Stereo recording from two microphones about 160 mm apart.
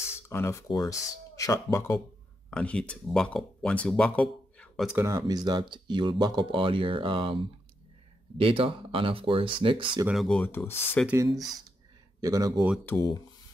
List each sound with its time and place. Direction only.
0.0 s a sound: 15° left (ahead or behind)
0.7 s speech: 20° left (ahead or behind)
4.8 s speech: 15° right (ahead or behind)
5.1 s speech: 25° right (ahead or behind)
8.4 s speech: 35° right (ahead or behind)
10.0 s speech: centre (ahead or behind)
11.1 s speech: 20° right (ahead or behind)
12.9 s speech: 15° left (ahead or behind)